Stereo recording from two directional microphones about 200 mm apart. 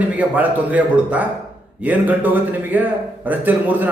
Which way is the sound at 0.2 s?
10° right (ahead or behind).